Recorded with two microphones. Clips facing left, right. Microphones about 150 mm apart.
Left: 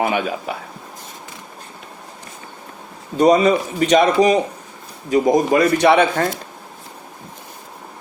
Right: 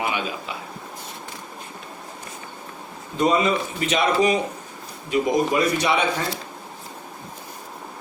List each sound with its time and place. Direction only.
0.0 s a man's voice: 50° left (ahead or behind)
3.2 s a man's voice: 40° left (ahead or behind)
5.5 s a man's voice: 60° left (ahead or behind)